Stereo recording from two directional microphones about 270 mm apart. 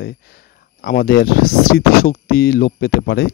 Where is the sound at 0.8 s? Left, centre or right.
Left.